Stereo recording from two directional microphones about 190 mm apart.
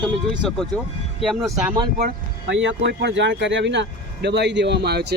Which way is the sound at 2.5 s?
70° right (ahead or behind).